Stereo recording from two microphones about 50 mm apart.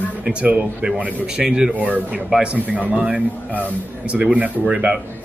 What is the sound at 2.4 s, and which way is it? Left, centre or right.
A man's voice, right.